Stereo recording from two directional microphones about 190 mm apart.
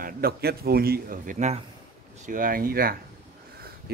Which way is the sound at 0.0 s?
55° right (ahead or behind).